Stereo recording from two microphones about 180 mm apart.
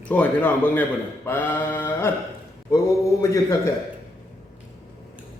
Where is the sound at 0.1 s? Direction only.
10° left (ahead or behind).